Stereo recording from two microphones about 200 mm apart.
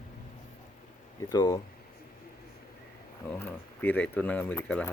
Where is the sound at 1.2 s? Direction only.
20° left (ahead or behind).